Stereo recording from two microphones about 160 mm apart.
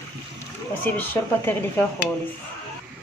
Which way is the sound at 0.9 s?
15° left (ahead or behind).